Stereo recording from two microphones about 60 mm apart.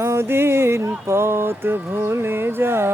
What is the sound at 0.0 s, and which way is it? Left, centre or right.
Music, right.